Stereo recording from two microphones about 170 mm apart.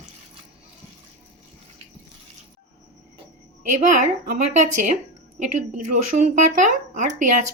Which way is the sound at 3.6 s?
45° right (ahead or behind).